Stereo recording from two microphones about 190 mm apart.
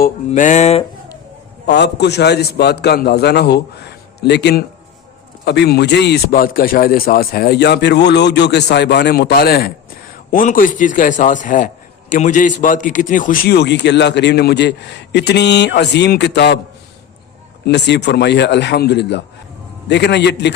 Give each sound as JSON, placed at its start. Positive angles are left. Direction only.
{"t": 0.3, "sound": "music", "side_deg": 40}
{"t": 1.6, "sound": "a man's voice", "side_deg": 65}
{"t": 17.7, "sound": "a man's voice", "side_deg": 65}